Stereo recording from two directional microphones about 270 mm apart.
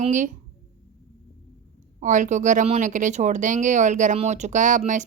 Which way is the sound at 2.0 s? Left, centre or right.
Right.